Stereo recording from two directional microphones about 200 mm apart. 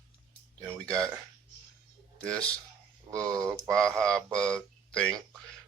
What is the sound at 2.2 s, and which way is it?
Speech, 5° left (ahead or behind).